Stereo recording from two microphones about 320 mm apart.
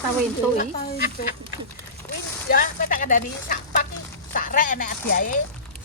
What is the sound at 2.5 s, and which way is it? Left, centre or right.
Speech, left.